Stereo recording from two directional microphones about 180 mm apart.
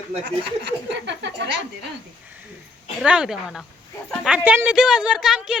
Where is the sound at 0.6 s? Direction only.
80° right.